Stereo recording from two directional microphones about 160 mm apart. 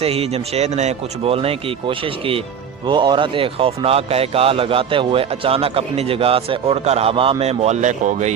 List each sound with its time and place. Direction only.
0.0 s speech: 40° right (ahead or behind)